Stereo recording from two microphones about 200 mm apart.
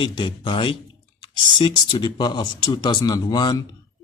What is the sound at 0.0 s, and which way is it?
Speech, 25° left (ahead or behind).